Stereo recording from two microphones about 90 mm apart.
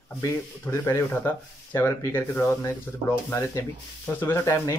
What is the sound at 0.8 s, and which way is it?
Speech, 25° left (ahead or behind).